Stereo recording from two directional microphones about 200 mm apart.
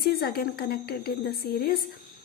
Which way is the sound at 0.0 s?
50° left (ahead or behind).